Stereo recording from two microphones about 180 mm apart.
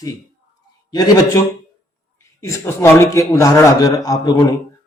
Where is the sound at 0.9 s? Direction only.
20° left (ahead or behind).